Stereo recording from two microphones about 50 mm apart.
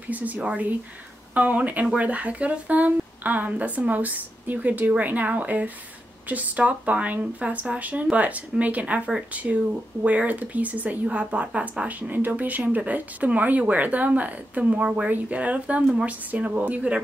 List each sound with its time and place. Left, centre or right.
0.1 s a woman's voice: right
12.1 s a woman's voice: right